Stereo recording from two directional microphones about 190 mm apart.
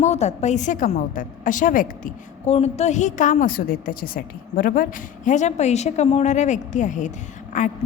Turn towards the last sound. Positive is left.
turn(degrees=40)  # may be behind; listen again after turning